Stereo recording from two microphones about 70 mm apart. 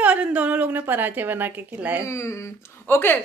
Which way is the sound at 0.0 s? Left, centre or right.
Centre.